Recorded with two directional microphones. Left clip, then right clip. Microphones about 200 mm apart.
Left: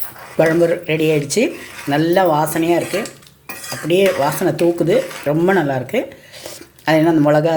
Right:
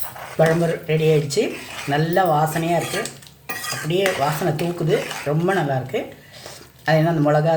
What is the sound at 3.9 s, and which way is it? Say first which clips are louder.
Speech: left 6 dB; 40° left (ahead or behind).